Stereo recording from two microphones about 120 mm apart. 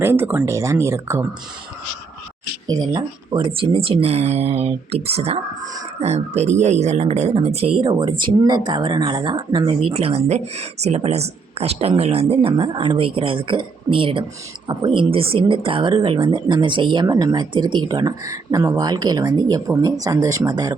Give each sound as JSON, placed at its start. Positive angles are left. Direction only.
{"t": 0.0, "sound": "speech", "side_deg": -20}
{"t": 2.6, "sound": "speech", "side_deg": -35}